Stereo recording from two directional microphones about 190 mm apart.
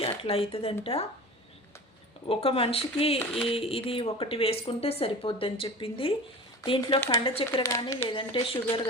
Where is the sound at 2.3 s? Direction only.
30° left (ahead or behind).